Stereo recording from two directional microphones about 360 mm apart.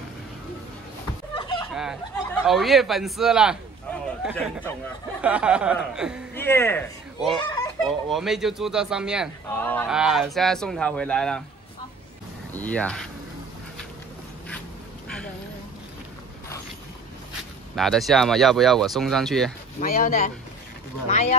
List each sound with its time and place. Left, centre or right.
1.3 s fowl: centre
1.7 s fowl: centre
2.4 s speech: centre
7.4 s a sound: centre
8.1 s speech: centre
12.5 s speech: centre
17.7 s speech: centre
19.8 s speech: left